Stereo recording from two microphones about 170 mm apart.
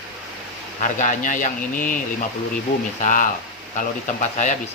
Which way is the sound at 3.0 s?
50° left (ahead or behind).